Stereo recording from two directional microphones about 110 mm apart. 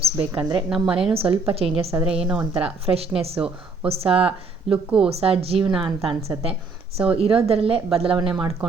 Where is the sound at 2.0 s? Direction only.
5° right (ahead or behind).